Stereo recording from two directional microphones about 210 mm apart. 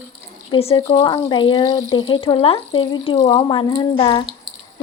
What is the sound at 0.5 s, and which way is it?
Speech, 25° left (ahead or behind).